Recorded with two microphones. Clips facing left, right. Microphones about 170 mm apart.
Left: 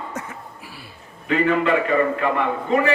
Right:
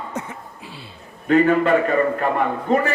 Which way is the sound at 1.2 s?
45° right (ahead or behind).